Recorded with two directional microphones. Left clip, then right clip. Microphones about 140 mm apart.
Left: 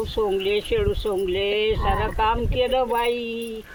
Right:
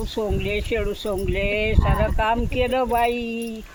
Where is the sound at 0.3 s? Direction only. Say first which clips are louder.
Left 3 dB; 45° right (ahead or behind).